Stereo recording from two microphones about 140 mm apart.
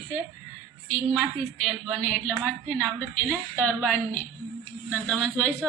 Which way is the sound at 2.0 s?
10° left (ahead or behind).